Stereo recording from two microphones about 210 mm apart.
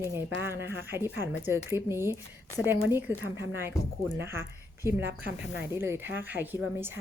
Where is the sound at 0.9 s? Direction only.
10° right (ahead or behind).